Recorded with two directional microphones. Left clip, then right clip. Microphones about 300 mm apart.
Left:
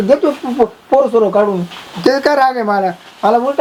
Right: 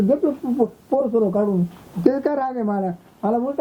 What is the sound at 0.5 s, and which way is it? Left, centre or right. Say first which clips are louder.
Speech: left 12 dB; centre.